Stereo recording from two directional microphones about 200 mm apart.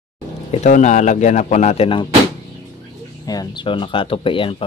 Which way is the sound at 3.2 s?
20° left (ahead or behind).